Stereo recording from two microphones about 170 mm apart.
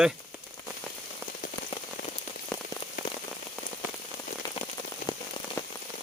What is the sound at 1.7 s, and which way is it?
Rain on surface, 35° left (ahead or behind).